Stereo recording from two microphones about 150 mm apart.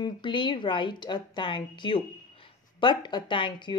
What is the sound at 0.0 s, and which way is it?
A woman's voice, 30° left (ahead or behind).